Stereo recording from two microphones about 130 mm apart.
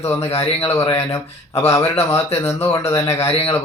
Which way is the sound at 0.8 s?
20° left (ahead or behind).